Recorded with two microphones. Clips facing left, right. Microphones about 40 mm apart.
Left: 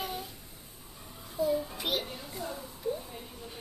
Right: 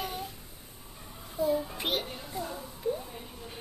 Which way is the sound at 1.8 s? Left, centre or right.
Right.